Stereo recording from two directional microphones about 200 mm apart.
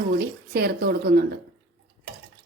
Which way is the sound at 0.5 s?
50° right (ahead or behind).